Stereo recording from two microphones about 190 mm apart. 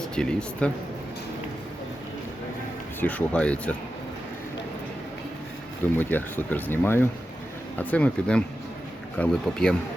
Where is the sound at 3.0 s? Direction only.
5° left (ahead or behind).